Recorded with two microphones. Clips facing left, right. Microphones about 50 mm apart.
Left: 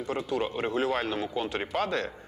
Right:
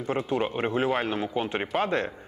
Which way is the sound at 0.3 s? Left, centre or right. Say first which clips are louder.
Right 2 dB; right.